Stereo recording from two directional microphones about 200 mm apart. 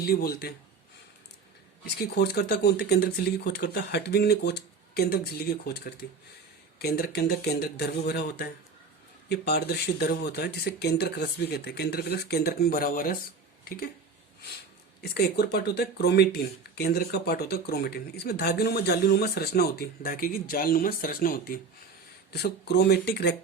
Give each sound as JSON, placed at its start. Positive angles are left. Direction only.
{"t": 0.0, "sound": "speech", "side_deg": 50}
{"t": 2.0, "sound": "speech", "side_deg": 55}
{"t": 15.0, "sound": "speech", "side_deg": 50}